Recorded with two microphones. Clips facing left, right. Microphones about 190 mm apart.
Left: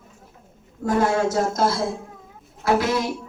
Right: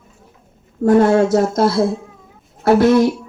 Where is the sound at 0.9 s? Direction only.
60° right (ahead or behind).